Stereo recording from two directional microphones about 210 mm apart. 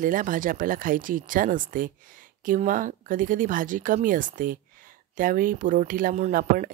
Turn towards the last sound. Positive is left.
turn(degrees=-40)  # may be behind; listen again after turning